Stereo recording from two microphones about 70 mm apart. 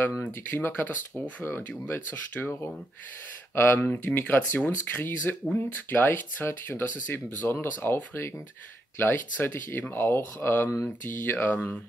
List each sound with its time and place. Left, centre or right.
0.2 s speech: left